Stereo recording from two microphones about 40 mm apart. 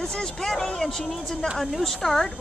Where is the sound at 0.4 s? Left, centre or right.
Centre.